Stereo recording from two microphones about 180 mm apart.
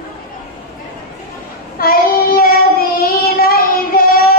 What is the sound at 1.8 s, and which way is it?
Child singing, 55° left (ahead or behind).